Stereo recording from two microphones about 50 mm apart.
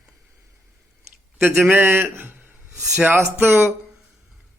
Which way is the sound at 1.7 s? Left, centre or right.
Right.